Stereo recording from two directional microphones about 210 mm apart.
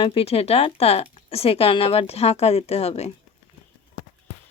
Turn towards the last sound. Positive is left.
turn(degrees=30)  # may be behind; listen again after turning